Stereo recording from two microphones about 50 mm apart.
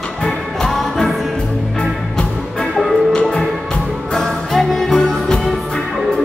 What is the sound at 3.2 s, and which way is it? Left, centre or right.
Music, centre.